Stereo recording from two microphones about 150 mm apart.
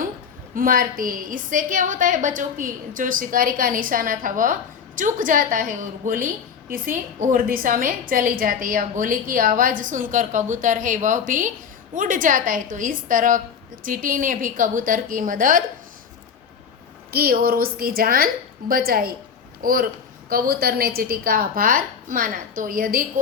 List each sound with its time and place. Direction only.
0.5 s a woman's voice: 70° right (ahead or behind)
17.1 s a woman's voice: 90° right; by 23.2 s 75° right (ahead or behind)